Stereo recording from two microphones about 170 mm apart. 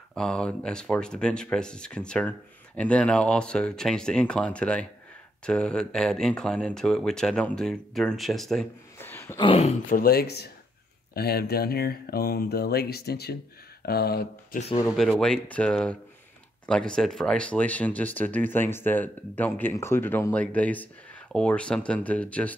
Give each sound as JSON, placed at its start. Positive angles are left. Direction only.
{"t": 0.1, "sound": "speech", "side_deg": 5}
{"t": 9.0, "sound": "a sound", "side_deg": 15}
{"t": 9.4, "sound": "speech", "side_deg": 35}
{"t": 9.8, "sound": "speech", "side_deg": 60}
{"t": 15.0, "sound": "speech", "side_deg": 5}